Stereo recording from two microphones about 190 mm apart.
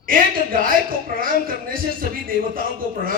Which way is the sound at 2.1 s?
50° left (ahead or behind).